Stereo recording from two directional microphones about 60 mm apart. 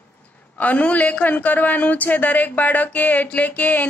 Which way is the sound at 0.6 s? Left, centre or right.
Left.